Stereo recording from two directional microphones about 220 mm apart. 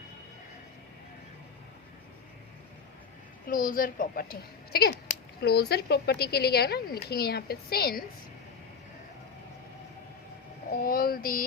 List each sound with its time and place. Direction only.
3.5 s a child's voice: 40° left (ahead or behind)
10.7 s a child's voice: 40° left (ahead or behind)